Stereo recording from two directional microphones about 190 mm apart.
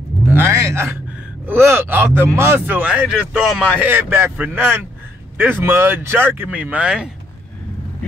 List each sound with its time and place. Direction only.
0.3 s music: 15° right (ahead or behind)
1.4 s speech: 10° right (ahead or behind)